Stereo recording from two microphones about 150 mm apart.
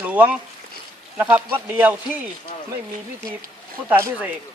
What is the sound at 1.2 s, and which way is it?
Speech, 10° right (ahead or behind).